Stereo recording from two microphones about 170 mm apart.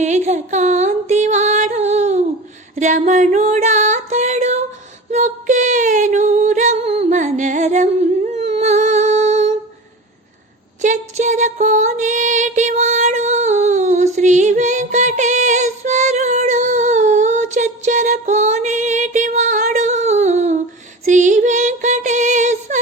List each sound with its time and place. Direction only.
0.0 s music: 45° right (ahead or behind)
2.7 s female singing: 45° right (ahead or behind)
10.8 s music: 45° right (ahead or behind)
21.0 s a sound: 45° right (ahead or behind)